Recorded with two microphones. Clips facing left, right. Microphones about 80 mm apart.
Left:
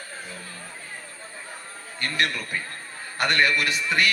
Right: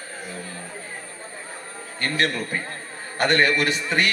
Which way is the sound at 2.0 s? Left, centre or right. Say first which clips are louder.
Right 3 dB; right.